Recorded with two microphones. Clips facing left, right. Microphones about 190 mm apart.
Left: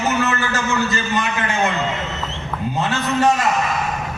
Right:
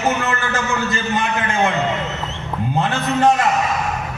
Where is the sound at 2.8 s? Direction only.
55° right (ahead or behind).